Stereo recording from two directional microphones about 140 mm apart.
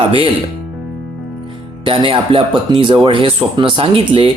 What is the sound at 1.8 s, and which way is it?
Speech, 40° right (ahead or behind).